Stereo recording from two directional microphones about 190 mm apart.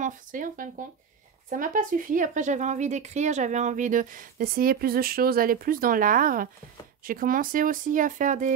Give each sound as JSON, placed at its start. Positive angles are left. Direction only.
{"t": 0.0, "sound": "speech", "side_deg": -45}